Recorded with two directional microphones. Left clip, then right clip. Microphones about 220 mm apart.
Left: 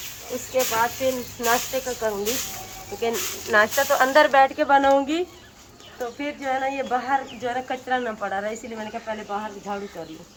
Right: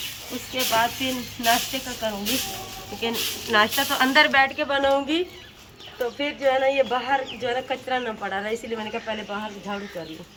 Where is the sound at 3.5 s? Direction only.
25° left (ahead or behind).